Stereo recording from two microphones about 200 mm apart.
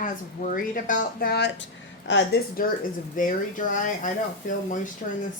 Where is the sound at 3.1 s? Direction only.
40° left (ahead or behind).